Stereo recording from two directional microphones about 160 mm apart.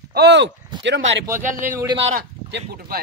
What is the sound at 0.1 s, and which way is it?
Speech, 90° right.